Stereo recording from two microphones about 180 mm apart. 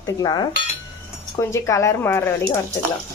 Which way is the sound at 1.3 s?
15° left (ahead or behind).